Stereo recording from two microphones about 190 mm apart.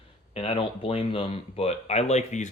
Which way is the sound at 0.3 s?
30° left (ahead or behind).